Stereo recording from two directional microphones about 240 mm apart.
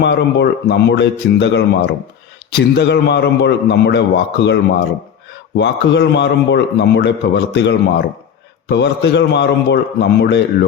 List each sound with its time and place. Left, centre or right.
0.0 s a man's voice: left
5.5 s a man's voice: left